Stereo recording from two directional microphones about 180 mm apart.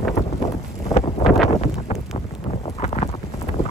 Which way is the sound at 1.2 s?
Centre (ahead or behind).